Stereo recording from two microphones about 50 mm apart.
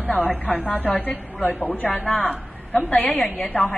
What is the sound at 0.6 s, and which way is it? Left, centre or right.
A woman's voice, left.